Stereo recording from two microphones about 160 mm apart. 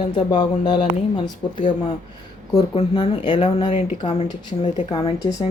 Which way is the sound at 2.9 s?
30° left (ahead or behind).